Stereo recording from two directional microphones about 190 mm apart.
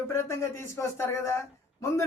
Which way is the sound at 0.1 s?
15° left (ahead or behind).